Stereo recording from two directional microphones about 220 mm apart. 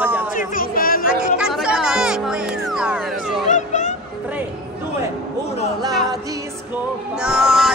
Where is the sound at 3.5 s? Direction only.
35° left (ahead or behind).